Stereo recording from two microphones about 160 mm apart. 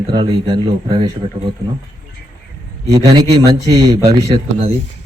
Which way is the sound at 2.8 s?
25° right (ahead or behind).